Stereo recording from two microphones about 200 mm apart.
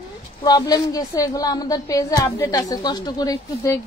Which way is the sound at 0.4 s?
20° left (ahead or behind).